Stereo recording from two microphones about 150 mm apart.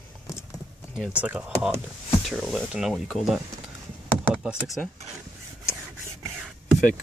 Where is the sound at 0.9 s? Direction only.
5° right (ahead or behind).